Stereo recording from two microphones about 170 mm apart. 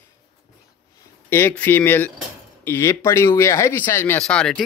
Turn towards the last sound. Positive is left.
turn(degrees=5)  # may be behind; listen again after turning